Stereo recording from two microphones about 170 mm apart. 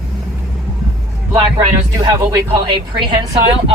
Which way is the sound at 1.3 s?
20° right (ahead or behind).